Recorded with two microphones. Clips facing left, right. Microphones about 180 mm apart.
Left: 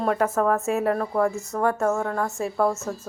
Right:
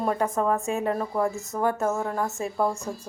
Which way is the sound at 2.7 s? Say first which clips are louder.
Left 2 dB; 5° left (ahead or behind).